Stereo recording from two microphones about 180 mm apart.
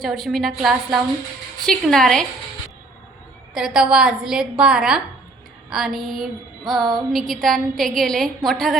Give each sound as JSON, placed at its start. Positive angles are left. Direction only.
{"t": 0.0, "sound": "music", "side_deg": 0}
{"t": 3.5, "sound": "music", "side_deg": -5}